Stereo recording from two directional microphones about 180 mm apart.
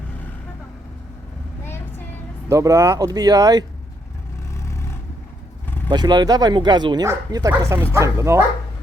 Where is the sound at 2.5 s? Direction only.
15° right (ahead or behind).